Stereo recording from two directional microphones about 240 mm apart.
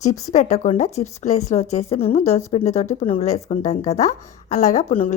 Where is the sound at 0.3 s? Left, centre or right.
Left.